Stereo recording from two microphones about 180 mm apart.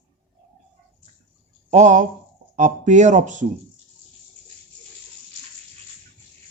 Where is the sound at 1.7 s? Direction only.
40° right (ahead or behind).